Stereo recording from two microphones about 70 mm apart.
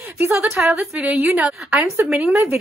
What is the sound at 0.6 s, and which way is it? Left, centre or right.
A woman's voice, centre.